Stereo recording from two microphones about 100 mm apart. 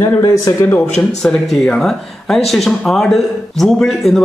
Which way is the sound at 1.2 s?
5° left (ahead or behind).